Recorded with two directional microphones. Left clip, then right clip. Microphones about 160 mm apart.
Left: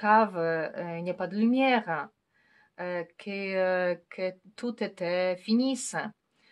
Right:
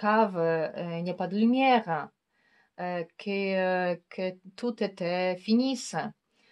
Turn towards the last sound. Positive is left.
turn(degrees=-25)  # may be behind; listen again after turning